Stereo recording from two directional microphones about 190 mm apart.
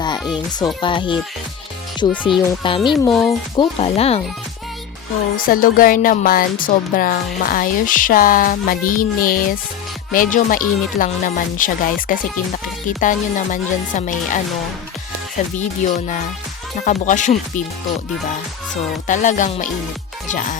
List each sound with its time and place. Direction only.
0.0 s a child's voice: 20° left (ahead or behind)
5.5 s speech: 45° left (ahead or behind)
15.8 s speech: 40° left (ahead or behind)
19.0 s speech: 40° left (ahead or behind)